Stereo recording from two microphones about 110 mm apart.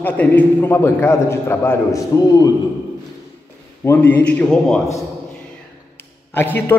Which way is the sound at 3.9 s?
15° left (ahead or behind).